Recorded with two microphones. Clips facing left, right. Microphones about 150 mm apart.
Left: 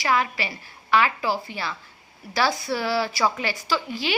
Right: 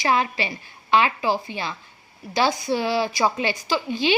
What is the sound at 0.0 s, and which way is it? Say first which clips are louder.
A woman's voice: right 2 dB; 25° right (ahead or behind).